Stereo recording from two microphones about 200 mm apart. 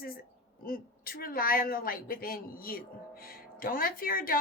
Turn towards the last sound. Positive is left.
turn(degrees=45)  # may be behind; listen again after turning